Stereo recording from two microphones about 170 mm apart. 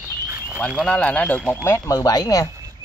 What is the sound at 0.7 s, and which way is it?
Speech, centre (ahead or behind).